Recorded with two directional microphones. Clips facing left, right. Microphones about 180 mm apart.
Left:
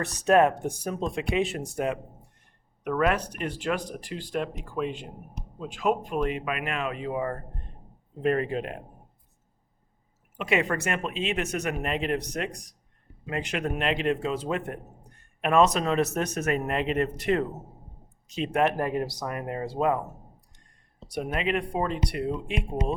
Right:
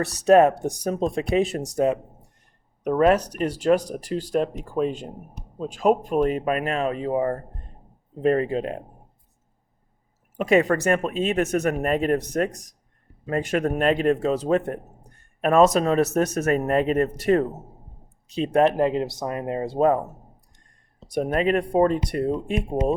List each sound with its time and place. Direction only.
0.0 s speech: 35° right (ahead or behind)
10.3 s speech: 40° right (ahead or behind)
18.8 s speech: 20° right (ahead or behind)
19.8 s speech: 40° right (ahead or behind)
21.1 s speech: 45° right (ahead or behind)